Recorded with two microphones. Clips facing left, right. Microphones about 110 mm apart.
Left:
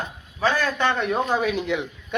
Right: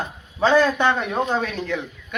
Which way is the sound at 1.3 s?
10° left (ahead or behind).